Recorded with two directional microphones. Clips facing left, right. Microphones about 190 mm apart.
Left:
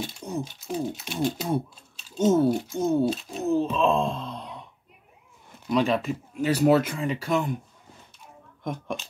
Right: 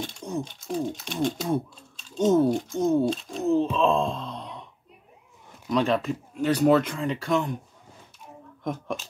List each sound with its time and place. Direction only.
0.0 s speech: 5° left (ahead or behind)
5.7 s speech: 5° left (ahead or behind)
8.6 s speech: centre (ahead or behind)